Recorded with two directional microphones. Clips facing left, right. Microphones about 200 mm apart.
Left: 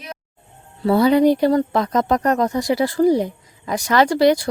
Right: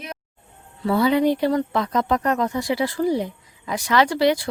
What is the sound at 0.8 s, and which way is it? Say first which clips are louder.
Speech: left 4 dB; 40° left (ahead or behind).